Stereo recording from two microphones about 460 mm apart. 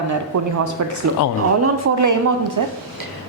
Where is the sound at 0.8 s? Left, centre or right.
Right.